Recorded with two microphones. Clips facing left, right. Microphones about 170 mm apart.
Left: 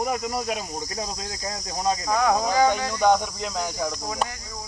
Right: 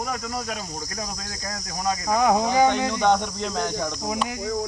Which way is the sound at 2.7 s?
20° right (ahead or behind).